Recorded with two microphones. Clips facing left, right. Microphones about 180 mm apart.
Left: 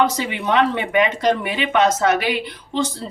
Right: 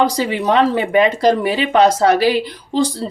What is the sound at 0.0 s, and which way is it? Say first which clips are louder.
Speech: right 4 dB; 35° right (ahead or behind).